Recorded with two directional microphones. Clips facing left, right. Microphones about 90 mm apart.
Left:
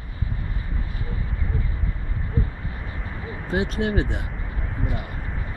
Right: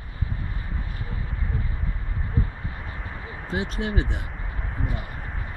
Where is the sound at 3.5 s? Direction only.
60° left (ahead or behind).